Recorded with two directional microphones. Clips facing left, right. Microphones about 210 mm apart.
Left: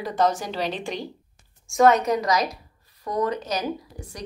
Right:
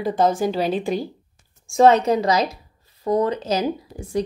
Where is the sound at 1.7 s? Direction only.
30° right (ahead or behind).